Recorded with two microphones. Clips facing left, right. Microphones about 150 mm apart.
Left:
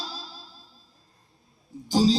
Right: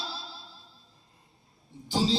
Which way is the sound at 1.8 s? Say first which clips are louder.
Left 6 dB; 40° left (ahead or behind).